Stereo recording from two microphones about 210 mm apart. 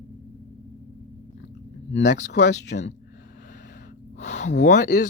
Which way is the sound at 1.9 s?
55° left (ahead or behind).